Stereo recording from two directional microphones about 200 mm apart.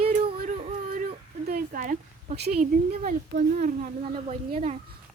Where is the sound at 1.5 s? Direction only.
45° right (ahead or behind).